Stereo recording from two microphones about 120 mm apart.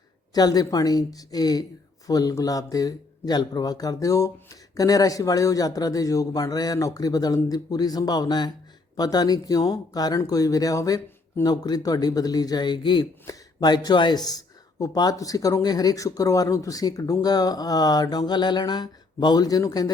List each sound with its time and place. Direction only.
0.3 s speech: 30° left (ahead or behind)